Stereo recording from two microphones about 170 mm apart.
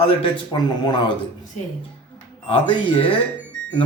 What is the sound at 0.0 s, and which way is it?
A man's voice, 30° left (ahead or behind).